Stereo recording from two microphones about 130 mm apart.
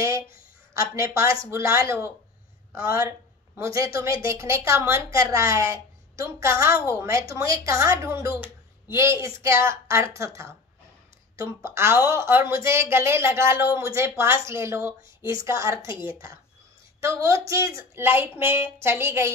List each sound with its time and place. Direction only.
0.7 s a woman's voice: 25° right (ahead or behind)